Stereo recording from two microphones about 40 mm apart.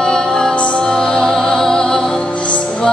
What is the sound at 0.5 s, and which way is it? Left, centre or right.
Music, left.